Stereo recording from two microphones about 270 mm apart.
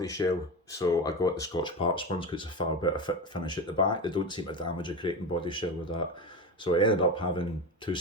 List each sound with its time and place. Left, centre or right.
0.0 s speech: centre